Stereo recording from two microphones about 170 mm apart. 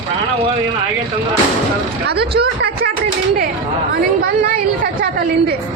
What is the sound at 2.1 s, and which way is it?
Speech, 70° right (ahead or behind).